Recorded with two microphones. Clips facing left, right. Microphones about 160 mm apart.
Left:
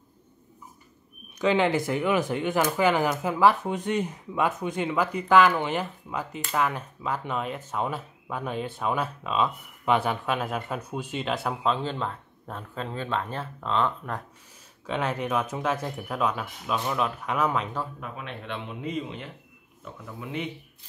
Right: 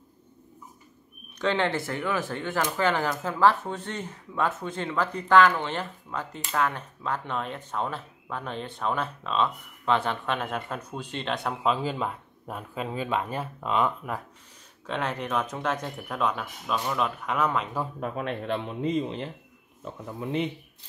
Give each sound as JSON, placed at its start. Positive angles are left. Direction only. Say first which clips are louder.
{"t": 1.4, "sound": "speech", "louder": "left 3 dB", "side_deg": 10}
{"t": 14.9, "sound": "speech", "louder": "left 2 dB", "side_deg": 0}
{"t": 18.0, "sound": "a man's voice", "louder": "right 7 dB", "side_deg": -40}